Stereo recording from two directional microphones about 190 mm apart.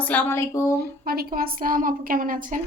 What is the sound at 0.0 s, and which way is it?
Speech, 10° left (ahead or behind).